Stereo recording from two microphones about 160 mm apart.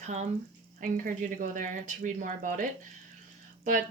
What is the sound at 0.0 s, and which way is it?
Speech, 45° right (ahead or behind).